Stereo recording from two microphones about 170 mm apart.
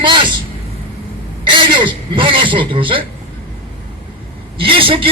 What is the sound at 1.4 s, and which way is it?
A man's voice, 30° right (ahead or behind).